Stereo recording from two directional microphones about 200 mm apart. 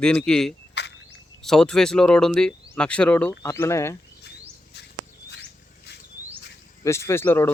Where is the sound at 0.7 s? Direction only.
60° left (ahead or behind).